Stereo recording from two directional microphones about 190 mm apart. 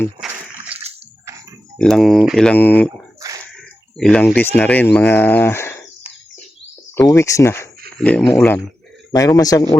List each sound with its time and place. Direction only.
1.2 s a sound: 15° right (ahead or behind)
1.8 s speech: centre (ahead or behind)
3.2 s a sound: 15° right (ahead or behind)
3.5 s speech: 5° left (ahead or behind)
6.9 s speech: 15° left (ahead or behind)
9.1 s a man's voice: 20° left (ahead or behind)